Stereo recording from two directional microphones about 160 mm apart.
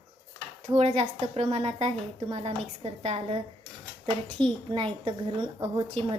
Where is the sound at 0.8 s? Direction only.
40° right (ahead or behind).